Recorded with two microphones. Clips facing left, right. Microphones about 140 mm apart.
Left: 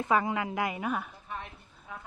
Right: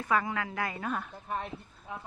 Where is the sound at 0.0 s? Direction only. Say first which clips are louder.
Left 2 dB; 20° left (ahead or behind).